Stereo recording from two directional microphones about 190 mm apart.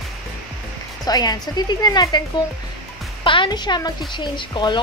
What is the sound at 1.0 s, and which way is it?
A woman's voice, 20° left (ahead or behind).